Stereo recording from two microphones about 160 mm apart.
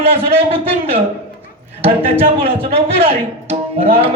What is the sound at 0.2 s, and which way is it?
Speech, 35° right (ahead or behind).